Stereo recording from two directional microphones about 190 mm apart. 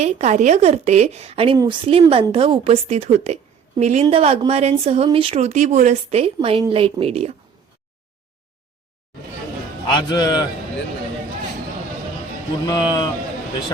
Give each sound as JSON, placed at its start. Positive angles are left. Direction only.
{"t": 0.0, "sound": "speech", "side_deg": -35}
{"t": 9.9, "sound": "a man's voice", "side_deg": 20}
{"t": 12.6, "sound": "a man's voice", "side_deg": 20}